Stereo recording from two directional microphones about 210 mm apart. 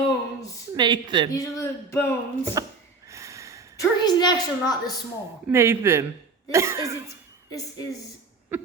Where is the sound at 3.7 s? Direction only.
20° left (ahead or behind).